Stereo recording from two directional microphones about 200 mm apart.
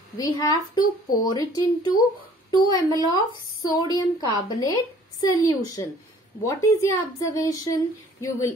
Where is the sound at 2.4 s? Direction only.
20° left (ahead or behind).